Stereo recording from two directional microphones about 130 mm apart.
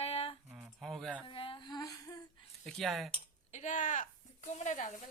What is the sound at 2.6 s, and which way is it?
Speech, centre (ahead or behind).